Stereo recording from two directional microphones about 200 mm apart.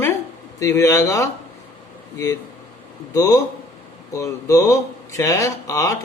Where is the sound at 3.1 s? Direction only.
15° left (ahead or behind).